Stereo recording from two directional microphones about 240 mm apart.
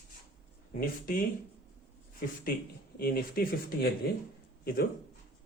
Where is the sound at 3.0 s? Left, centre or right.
Left.